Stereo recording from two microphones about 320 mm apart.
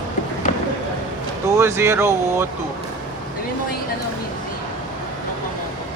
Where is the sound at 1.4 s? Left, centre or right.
Centre.